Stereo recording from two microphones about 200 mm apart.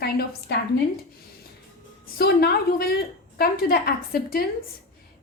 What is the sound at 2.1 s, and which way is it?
A woman's voice, 50° left (ahead or behind).